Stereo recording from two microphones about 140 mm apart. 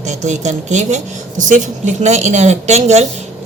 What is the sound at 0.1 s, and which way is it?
A woman's voice, 55° right (ahead or behind).